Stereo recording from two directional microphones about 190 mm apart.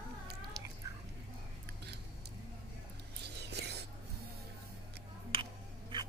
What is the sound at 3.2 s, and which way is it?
Whispering, 60° right (ahead or behind).